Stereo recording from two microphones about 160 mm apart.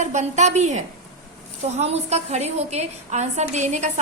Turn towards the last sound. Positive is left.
turn(degrees=-45)  # may be behind; listen again after turning